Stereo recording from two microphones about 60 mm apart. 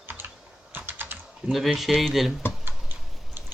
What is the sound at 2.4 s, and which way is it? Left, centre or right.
Typing, left.